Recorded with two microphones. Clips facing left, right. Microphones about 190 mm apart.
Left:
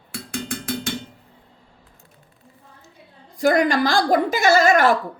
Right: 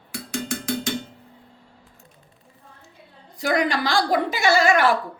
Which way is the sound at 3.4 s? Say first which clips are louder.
Left 5 dB; 45° left (ahead or behind).